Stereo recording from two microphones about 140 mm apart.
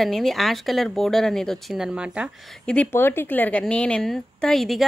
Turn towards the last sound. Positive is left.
turn(degrees=0)  # may be behind; listen again after turning